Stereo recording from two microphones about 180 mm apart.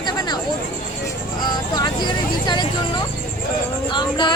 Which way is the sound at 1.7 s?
25° left (ahead or behind).